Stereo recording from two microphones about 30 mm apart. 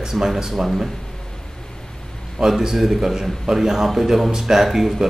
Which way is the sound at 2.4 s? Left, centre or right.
Centre.